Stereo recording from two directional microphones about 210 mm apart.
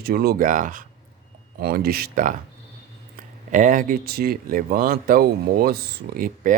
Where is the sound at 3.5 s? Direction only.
40° right (ahead or behind).